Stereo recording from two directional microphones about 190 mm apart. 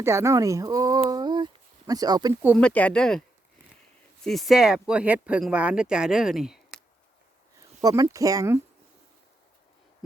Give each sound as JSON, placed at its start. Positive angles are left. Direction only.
{"t": 0.0, "sound": "speech", "side_deg": -15}
{"t": 1.1, "sound": "a sound", "side_deg": -20}
{"t": 1.9, "sound": "speech", "side_deg": -20}
{"t": 2.6, "sound": "speech", "side_deg": 5}
{"t": 7.8, "sound": "speech", "side_deg": -20}